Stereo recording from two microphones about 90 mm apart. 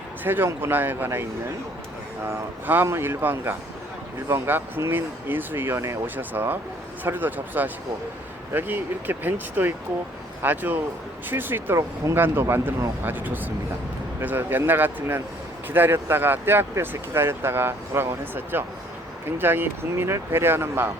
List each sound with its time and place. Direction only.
0.3 s speech: 25° right (ahead or behind)
2.2 s speech: 25° right (ahead or behind)